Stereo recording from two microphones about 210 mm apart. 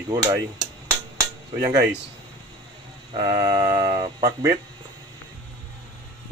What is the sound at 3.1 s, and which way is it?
Speech, 25° right (ahead or behind).